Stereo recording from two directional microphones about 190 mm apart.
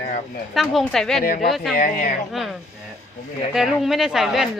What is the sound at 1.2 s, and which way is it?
Speech, 50° left (ahead or behind).